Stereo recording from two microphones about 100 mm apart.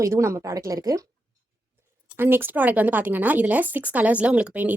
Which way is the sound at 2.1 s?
20° right (ahead or behind).